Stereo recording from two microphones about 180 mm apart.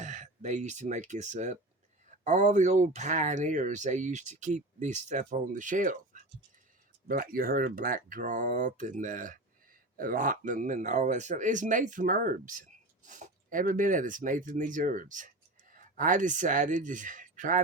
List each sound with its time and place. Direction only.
0.0 s speech: 45° right (ahead or behind)
7.1 s speech: 50° right (ahead or behind)